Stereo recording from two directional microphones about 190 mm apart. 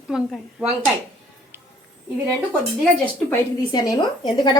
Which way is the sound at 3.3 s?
20° left (ahead or behind).